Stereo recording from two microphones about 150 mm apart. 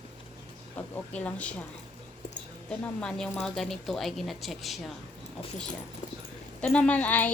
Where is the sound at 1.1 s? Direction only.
10° left (ahead or behind).